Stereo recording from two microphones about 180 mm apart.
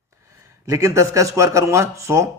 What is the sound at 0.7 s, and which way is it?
Speech, 20° right (ahead or behind).